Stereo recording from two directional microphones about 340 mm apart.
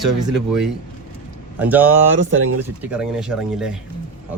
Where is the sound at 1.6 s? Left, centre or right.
Centre.